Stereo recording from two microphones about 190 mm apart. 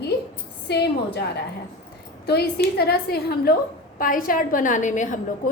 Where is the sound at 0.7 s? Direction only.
60° left (ahead or behind).